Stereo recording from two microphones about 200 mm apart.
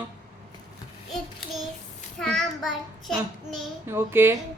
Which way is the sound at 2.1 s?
Centre (ahead or behind).